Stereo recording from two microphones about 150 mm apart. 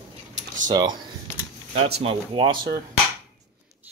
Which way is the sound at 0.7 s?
30° right (ahead or behind).